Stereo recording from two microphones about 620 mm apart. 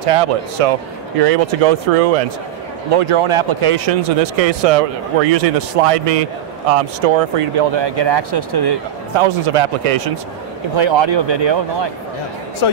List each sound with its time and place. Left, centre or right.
0.0 s speech: right
2.9 s speech: right
9.2 s speech: right
10.8 s a man's voice: right
12.6 s speech: left